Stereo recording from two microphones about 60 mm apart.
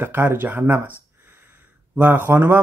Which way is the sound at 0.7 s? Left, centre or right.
Right.